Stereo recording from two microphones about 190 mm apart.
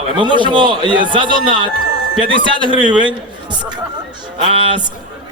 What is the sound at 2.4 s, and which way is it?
Speech, 25° right (ahead or behind).